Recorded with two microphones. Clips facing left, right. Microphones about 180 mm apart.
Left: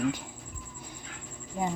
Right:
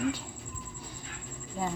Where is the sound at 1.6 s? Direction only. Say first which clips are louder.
Left 2 dB; 15° left (ahead or behind).